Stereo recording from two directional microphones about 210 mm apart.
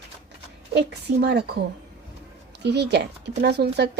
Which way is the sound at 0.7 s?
55° right (ahead or behind).